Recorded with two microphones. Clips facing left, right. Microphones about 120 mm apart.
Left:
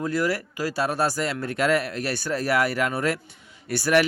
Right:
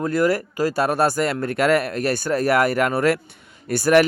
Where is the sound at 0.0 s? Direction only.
50° right (ahead or behind).